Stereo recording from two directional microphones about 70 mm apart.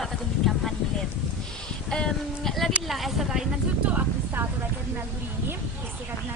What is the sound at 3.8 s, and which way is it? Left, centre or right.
Speech, right.